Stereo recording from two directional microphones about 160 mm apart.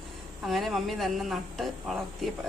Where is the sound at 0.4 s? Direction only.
Centre (ahead or behind).